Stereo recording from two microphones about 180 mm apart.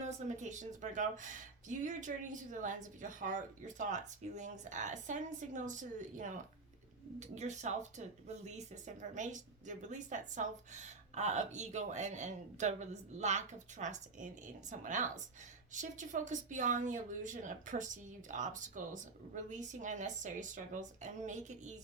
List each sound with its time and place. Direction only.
0.0 s speech: 40° right (ahead or behind)